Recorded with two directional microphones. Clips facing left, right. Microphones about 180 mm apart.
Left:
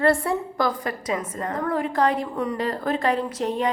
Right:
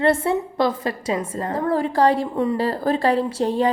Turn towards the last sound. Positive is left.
turn(degrees=-30)  # may be behind; listen again after turning